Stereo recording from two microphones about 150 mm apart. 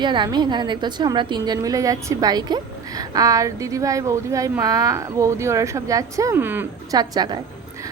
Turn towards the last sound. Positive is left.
turn(degrees=-25)  # may be behind; listen again after turning